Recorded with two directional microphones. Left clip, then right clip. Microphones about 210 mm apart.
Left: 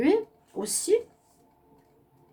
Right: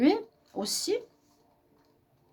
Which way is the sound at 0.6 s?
50° right (ahead or behind).